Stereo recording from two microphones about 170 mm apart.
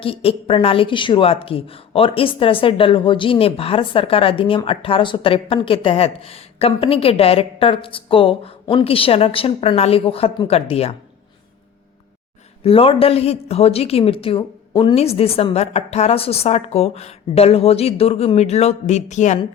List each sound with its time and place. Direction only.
0.0 s a woman's voice: 35° left (ahead or behind)
12.6 s a woman's voice: 35° left (ahead or behind)